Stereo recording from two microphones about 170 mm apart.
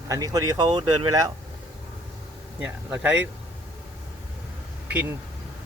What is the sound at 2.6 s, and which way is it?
Speech, 10° right (ahead or behind).